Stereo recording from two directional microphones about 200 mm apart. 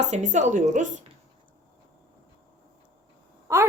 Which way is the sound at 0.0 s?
35° right (ahead or behind).